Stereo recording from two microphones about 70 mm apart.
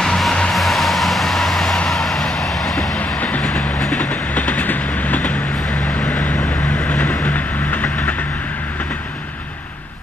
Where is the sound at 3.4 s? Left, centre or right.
Centre.